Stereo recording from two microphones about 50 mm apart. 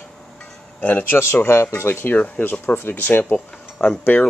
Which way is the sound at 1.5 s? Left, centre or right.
Left.